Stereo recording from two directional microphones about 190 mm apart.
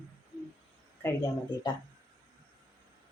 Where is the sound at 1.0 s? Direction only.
15° left (ahead or behind).